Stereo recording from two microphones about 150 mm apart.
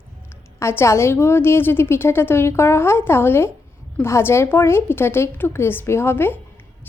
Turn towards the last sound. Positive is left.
turn(degrees=15)  # may be behind; listen again after turning